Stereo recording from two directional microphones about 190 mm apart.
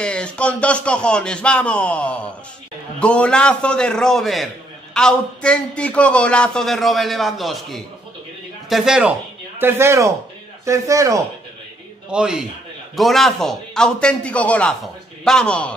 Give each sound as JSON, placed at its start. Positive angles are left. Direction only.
{"t": 0.0, "sound": "a man's voice", "side_deg": 5}
{"t": 12.1, "sound": "a man's voice", "side_deg": -5}